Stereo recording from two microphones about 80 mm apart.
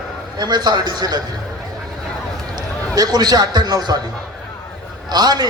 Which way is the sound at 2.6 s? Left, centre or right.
Right.